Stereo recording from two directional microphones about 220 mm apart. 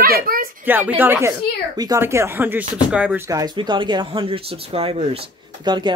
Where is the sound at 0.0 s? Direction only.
40° right (ahead or behind).